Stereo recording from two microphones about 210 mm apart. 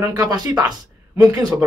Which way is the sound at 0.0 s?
15° right (ahead or behind).